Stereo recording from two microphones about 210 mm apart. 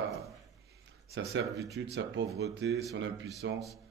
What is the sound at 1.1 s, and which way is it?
A man's voice, 55° right (ahead or behind).